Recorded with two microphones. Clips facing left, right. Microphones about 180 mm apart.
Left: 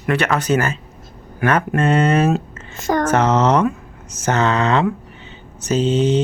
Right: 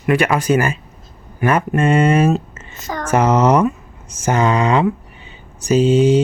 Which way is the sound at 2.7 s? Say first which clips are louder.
Left 8 dB; 50° left (ahead or behind).